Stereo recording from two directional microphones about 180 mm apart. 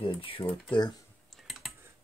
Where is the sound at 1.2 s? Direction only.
Centre (ahead or behind).